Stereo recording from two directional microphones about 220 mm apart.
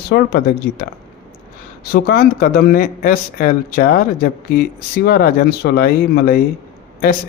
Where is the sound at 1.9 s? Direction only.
45° left (ahead or behind).